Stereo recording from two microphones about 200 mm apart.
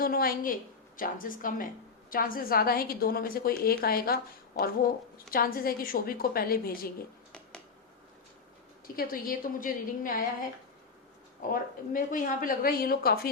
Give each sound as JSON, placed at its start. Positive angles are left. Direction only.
{"t": 0.0, "sound": "a woman's voice", "side_deg": 45}
{"t": 9.0, "sound": "a woman's voice", "side_deg": 45}
{"t": 11.9, "sound": "a woman's voice", "side_deg": 45}